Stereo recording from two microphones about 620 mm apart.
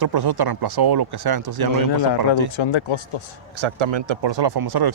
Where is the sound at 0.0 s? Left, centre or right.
Right.